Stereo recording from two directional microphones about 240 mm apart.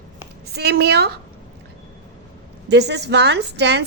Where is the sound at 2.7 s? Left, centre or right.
Right.